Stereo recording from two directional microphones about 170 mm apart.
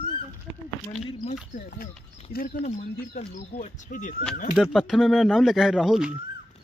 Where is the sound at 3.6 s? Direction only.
50° left (ahead or behind).